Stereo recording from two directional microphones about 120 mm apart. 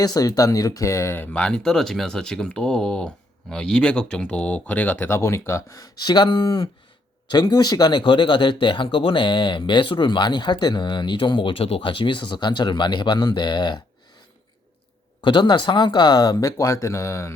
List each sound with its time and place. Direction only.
0.0 s speech: 30° left (ahead or behind)
15.2 s speech: 40° left (ahead or behind); by 17.3 s 25° left (ahead or behind)